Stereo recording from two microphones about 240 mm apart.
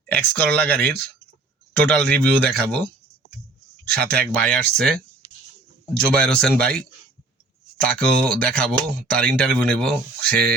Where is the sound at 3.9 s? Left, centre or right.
Right.